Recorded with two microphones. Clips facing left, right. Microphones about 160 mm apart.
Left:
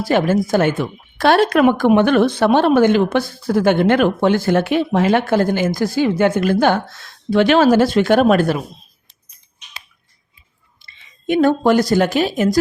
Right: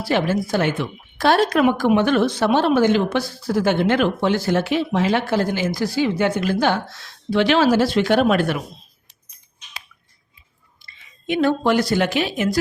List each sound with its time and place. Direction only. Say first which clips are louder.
0.0 s speech: left 4 dB; 50° left (ahead or behind)
1.2 s speech: left 3 dB; 65° left (ahead or behind); by 8.5 s 45° left (ahead or behind)
11.3 s a woman's voice: left 4 dB; 45° left (ahead or behind)